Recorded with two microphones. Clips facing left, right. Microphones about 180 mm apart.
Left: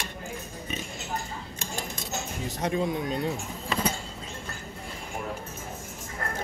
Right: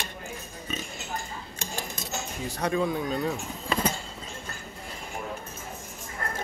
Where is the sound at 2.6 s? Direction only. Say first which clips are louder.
Right 1 dB; 20° left (ahead or behind).